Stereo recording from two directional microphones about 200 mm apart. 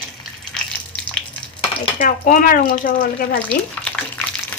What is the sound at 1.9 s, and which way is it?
Speech, 40° left (ahead or behind).